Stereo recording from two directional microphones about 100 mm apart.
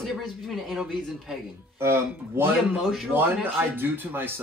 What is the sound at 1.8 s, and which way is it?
Speech, 25° right (ahead or behind).